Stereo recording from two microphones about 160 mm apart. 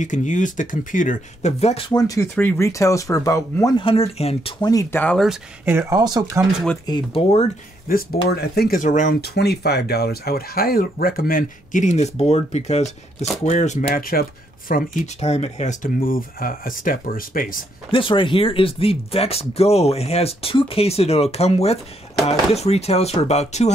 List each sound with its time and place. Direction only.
0.0 s speech: 50° left (ahead or behind)
1.9 s speech: 25° left (ahead or behind)
3.7 s speech: 35° left (ahead or behind)
4.6 s speech: 20° left (ahead or behind)
5.0 s speech: centre (ahead or behind)
5.7 s speech: 20° right (ahead or behind)
6.9 s speech: 35° left (ahead or behind)
7.9 s speech: 80° left; by 9.1 s 55° left (ahead or behind)
9.2 s speech: 90° left; by 14.8 s 55° left (ahead or behind)
15.1 s speech: 40° left (ahead or behind); by 17.6 s 60° left (ahead or behind)
17.9 s speech: 30° left (ahead or behind)